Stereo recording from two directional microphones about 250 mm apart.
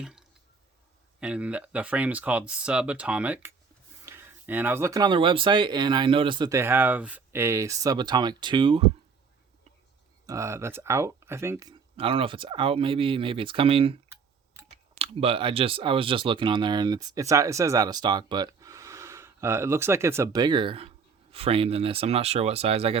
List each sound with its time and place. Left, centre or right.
0.0 s drip: centre
1.2 s speech: centre; by 8.9 s right
10.2 s speech: centre
14.9 s speech: right